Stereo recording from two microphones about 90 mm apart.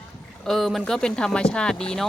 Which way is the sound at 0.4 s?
5° left (ahead or behind).